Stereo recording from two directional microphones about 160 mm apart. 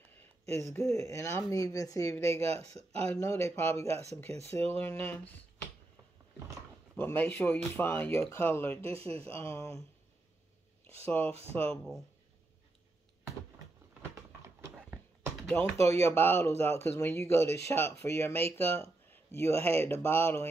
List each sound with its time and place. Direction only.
0.6 s speech: 15° left (ahead or behind)
2.4 s speech: 40° right (ahead or behind)
2.7 s speech: 15° left (ahead or behind)
7.0 s speech: 15° left (ahead or behind)
8.8 s speech: 35° right (ahead or behind)
9.1 s speech: 15° left (ahead or behind)
11.1 s speech: 10° left (ahead or behind)
15.4 s speech: 10° left (ahead or behind)